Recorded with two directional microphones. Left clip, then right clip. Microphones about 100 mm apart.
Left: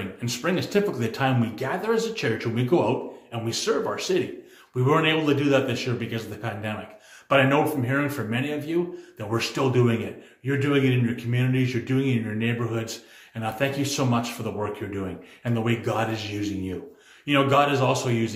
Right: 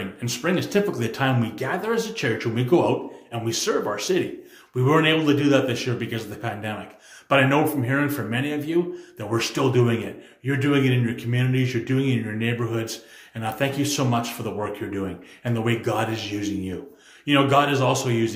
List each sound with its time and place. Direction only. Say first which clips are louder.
0.0 s a man's voice: right 1 dB; 20° right (ahead or behind)